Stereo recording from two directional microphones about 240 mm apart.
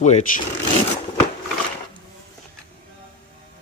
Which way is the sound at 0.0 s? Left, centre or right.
Left.